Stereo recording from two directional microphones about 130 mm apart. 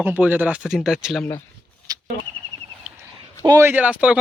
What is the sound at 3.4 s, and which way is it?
Speech, 20° right (ahead or behind).